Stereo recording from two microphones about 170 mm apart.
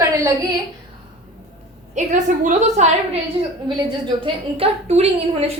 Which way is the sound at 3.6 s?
30° right (ahead or behind).